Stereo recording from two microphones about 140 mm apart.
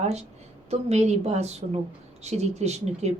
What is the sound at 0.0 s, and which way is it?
A woman's voice, 50° right (ahead or behind).